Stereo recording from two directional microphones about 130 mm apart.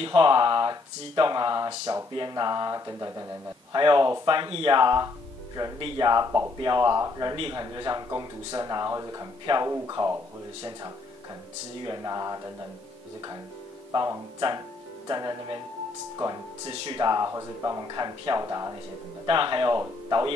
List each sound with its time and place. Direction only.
0.0 s speech: 40° right (ahead or behind)
7.3 s a man's voice: 45° right (ahead or behind)
7.6 s speech: 35° right (ahead or behind)
13.9 s speech: 30° right (ahead or behind)
16.6 s speech: 40° right (ahead or behind)
19.2 s speech: 40° right (ahead or behind)